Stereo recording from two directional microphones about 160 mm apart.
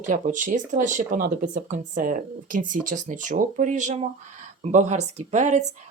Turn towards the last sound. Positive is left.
turn(degrees=-45)  # may be behind; listen again after turning